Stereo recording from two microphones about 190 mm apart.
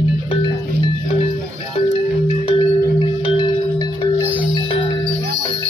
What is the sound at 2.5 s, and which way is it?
Tubular bells, 25° left (ahead or behind).